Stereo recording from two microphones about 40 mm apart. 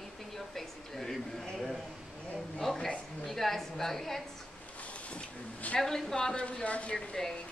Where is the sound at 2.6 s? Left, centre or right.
Centre.